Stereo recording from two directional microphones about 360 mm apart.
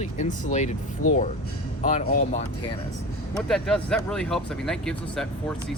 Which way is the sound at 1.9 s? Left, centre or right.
Centre.